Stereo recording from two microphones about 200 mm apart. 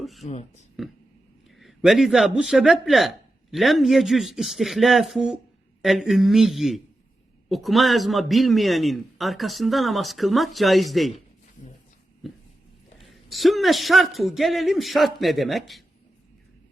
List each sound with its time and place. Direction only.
0.0 s speech: centre (ahead or behind)
0.3 s speech: 35° left (ahead or behind)
1.5 s a man's voice: centre (ahead or behind)
13.0 s a man's voice: centre (ahead or behind)